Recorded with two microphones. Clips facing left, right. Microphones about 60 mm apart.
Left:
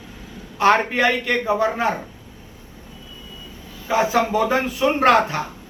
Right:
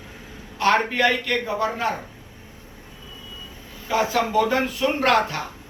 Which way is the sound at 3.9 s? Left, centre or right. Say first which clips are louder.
Left 3 dB; centre.